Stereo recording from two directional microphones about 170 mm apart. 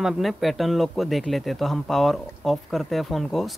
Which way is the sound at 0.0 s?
Centre (ahead or behind).